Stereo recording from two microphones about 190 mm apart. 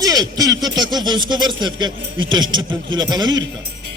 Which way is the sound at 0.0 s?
20° right (ahead or behind).